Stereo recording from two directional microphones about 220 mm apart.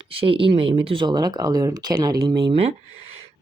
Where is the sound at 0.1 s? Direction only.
25° right (ahead or behind).